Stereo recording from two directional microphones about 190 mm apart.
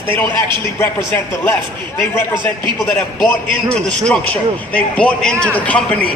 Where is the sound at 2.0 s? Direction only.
15° left (ahead or behind).